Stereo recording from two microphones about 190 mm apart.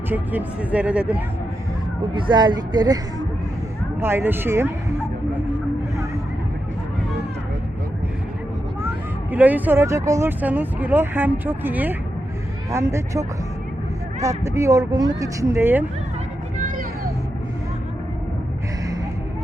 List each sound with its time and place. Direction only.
0.1 s speech: 10° right (ahead or behind)
2.1 s speech: 25° right (ahead or behind)
9.3 s speech: 10° right (ahead or behind)
16.6 s a sound: 45° right (ahead or behind)